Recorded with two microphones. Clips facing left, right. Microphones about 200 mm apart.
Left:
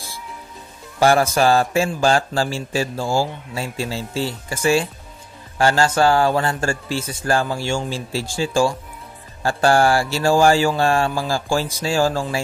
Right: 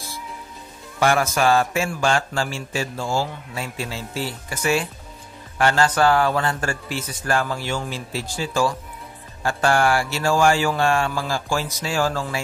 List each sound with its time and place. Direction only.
0.9 s a man's voice: 35° left (ahead or behind)